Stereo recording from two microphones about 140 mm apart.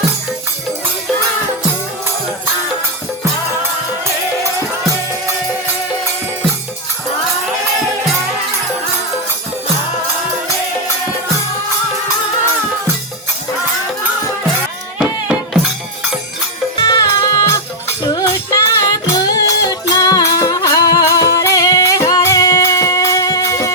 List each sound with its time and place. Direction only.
16.7 s music: 25° left (ahead or behind)